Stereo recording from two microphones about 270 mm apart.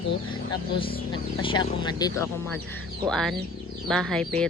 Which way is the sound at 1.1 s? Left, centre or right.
Centre.